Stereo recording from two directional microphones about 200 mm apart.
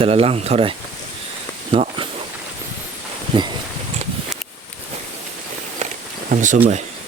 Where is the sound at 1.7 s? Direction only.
30° right (ahead or behind).